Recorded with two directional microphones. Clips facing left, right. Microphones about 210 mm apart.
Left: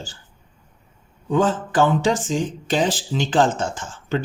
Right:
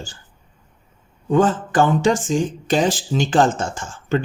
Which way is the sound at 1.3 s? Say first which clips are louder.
Right 3 dB; 50° right (ahead or behind).